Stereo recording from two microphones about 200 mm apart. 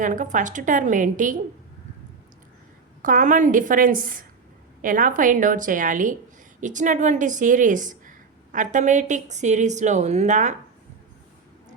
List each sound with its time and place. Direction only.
0.0 s a woman's voice: 40° right (ahead or behind)
3.0 s a woman's voice: 40° right (ahead or behind)